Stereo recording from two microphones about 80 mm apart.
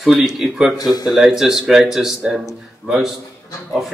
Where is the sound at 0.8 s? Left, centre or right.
Left.